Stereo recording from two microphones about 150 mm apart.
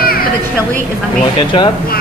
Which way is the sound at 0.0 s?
80° left.